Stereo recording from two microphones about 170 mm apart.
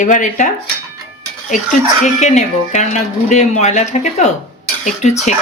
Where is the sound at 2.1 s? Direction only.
45° left (ahead or behind).